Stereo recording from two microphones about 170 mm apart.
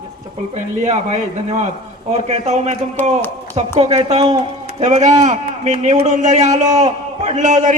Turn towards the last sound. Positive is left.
turn(degrees=-45)  # may be behind; listen again after turning